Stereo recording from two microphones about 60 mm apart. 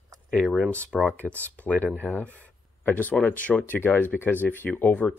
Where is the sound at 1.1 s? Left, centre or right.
Left.